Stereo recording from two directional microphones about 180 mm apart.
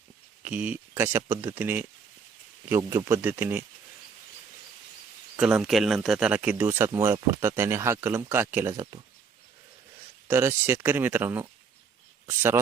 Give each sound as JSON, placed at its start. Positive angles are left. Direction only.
{"t": 0.4, "sound": "speech", "side_deg": -10}
{"t": 5.4, "sound": "speech", "side_deg": -5}
{"t": 10.2, "sound": "speech", "side_deg": -15}